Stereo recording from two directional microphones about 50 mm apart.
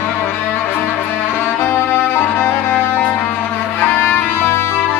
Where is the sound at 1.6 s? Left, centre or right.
Left.